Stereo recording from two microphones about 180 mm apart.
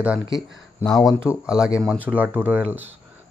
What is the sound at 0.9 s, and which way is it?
Speech, centre (ahead or behind).